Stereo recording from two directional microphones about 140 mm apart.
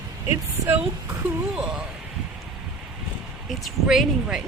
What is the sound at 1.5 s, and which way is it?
Speech, 5° right (ahead or behind).